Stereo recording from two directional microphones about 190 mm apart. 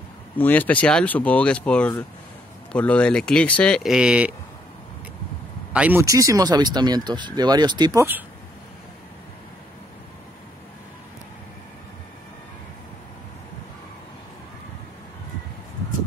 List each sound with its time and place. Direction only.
0.4 s speech: 10° left (ahead or behind)
5.7 s speech: 10° right (ahead or behind)